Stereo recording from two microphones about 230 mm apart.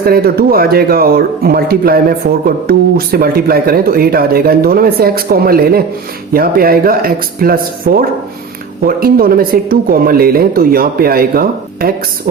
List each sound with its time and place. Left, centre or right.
0.0 s speech: right